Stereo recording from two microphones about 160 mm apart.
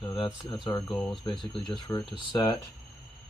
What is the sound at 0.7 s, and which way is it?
Speech, 25° left (ahead or behind).